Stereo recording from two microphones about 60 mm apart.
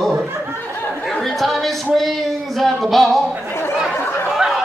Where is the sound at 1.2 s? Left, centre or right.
Centre.